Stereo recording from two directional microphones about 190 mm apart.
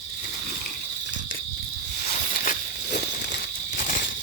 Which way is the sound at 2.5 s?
55° left (ahead or behind).